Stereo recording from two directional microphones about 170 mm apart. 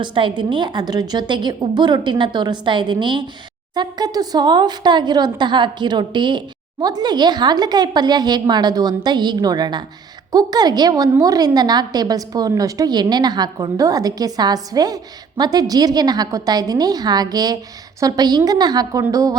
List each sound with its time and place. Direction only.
0.0 s a woman's voice: 30° right (ahead or behind)